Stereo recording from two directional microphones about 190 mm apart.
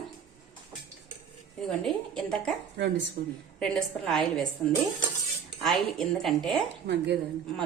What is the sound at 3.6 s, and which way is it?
Speech, centre (ahead or behind).